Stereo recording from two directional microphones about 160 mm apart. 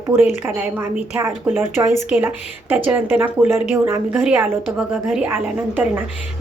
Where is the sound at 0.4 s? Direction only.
10° right (ahead or behind).